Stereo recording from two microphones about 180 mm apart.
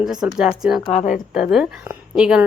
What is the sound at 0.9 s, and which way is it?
Speech, 40° left (ahead or behind).